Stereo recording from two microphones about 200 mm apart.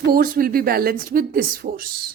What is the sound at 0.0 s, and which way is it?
Speech, 45° right (ahead or behind).